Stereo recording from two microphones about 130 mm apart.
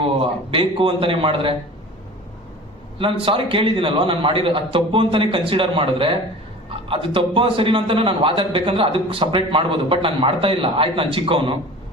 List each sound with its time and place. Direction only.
0.0 s a man's voice: 45° right (ahead or behind)
3.0 s a man's voice: 45° right (ahead or behind)